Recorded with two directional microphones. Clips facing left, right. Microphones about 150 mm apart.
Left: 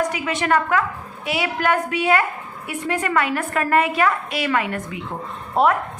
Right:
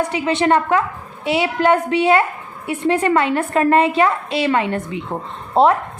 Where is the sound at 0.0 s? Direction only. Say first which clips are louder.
Right 5 dB; 30° right (ahead or behind).